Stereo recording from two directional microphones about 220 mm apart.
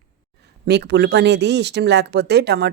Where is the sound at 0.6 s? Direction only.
50° right (ahead or behind).